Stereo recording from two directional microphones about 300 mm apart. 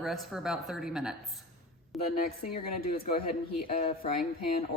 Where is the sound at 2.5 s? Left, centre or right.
Left.